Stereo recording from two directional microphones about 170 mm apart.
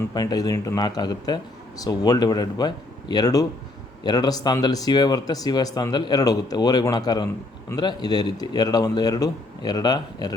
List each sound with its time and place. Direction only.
0.1 s speech: 25° left (ahead or behind)